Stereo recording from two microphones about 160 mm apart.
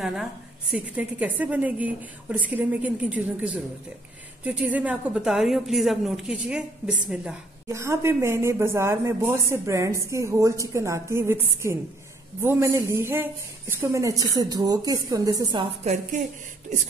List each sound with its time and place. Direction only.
0.0 s a woman's voice: 5° right (ahead or behind)
7.6 s a woman's voice: 20° right (ahead or behind)
15.8 s a woman's voice: 45° right (ahead or behind)